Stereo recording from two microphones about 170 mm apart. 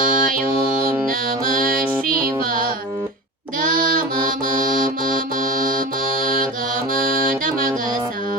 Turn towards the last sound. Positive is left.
turn(degrees=-55)  # may be behind; listen again after turning